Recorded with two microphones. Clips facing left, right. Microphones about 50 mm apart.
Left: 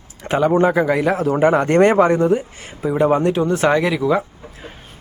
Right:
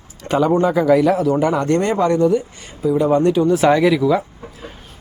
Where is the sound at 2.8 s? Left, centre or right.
Left.